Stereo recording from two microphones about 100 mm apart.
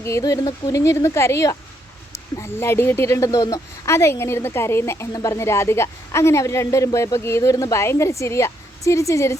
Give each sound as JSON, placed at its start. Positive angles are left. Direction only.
{"t": 0.0, "sound": "speech", "side_deg": 35}
{"t": 3.8, "sound": "speech", "side_deg": 25}